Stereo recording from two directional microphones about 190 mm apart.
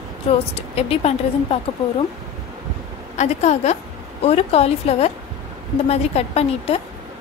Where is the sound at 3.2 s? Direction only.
35° left (ahead or behind).